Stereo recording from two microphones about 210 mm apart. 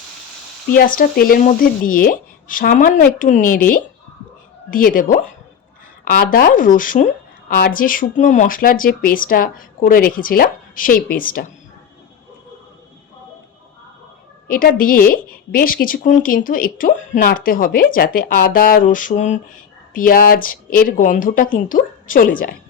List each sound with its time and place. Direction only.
0.7 s a woman's voice: 45° left (ahead or behind)
14.4 s a woman's voice: 45° left (ahead or behind)